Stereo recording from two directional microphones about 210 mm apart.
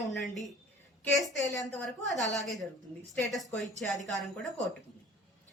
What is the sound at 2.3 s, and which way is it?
Speech, centre (ahead or behind).